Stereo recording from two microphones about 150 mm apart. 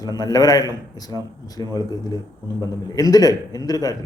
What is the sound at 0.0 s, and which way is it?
A man's voice, 25° left (ahead or behind).